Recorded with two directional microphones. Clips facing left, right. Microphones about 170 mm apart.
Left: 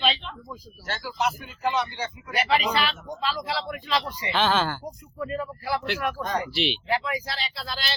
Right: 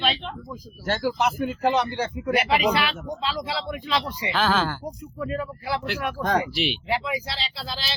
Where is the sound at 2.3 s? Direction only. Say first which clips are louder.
Right 2 dB; 5° right (ahead or behind).